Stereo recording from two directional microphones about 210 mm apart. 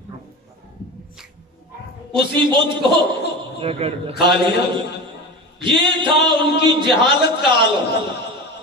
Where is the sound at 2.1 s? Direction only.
20° right (ahead or behind).